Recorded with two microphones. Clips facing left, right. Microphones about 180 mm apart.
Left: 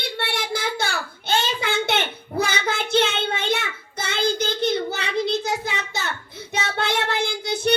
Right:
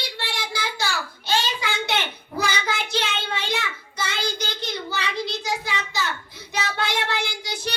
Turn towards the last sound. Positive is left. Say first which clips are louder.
# left 8 dB
turn(degrees=55)  # may be behind; listen again after turning